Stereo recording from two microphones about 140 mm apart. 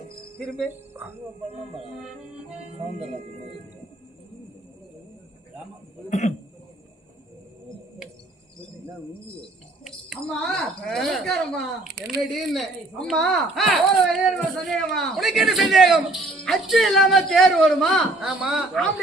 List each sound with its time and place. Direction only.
0.3 s speech: 5° left (ahead or behind)
6.1 s speech: 55° left (ahead or behind)
9.8 s speech: centre (ahead or behind)